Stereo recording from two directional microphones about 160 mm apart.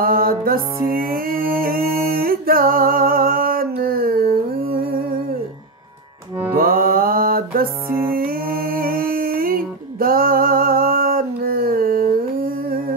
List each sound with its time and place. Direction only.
0.0 s music: 65° right (ahead or behind)
6.5 s music: 65° right (ahead or behind)